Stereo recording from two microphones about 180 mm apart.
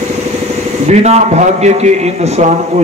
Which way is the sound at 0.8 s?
35° right (ahead or behind).